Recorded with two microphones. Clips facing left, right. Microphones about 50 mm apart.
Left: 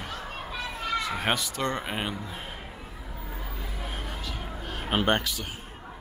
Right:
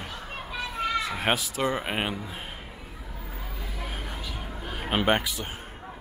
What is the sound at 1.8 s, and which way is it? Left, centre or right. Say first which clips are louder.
Speech: right 2 dB; right.